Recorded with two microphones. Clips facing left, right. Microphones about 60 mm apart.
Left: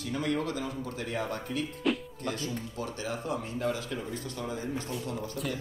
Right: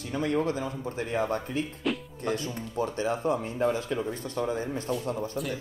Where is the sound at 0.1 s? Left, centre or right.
Right.